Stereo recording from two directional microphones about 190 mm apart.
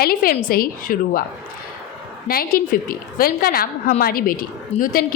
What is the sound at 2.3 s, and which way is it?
A woman's voice, 50° left (ahead or behind).